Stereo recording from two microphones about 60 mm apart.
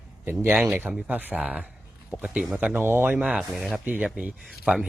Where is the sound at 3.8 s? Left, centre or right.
Right.